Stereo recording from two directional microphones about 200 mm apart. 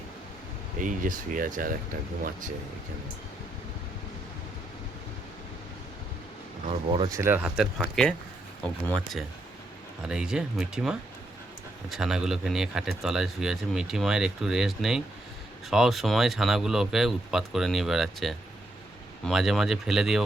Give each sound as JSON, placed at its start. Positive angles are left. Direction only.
{"t": 0.8, "sound": "speech", "side_deg": -40}
{"t": 7.1, "sound": "speech", "side_deg": -10}
{"t": 10.0, "sound": "speech", "side_deg": -5}